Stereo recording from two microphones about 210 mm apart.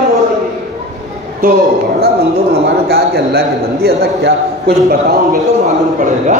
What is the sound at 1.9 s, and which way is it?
Speech, 50° right (ahead or behind).